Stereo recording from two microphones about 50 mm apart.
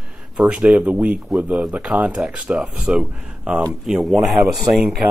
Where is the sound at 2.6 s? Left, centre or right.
Centre.